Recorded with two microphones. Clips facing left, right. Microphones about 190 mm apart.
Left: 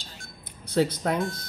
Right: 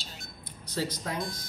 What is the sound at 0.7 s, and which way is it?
Speech, 60° left (ahead or behind).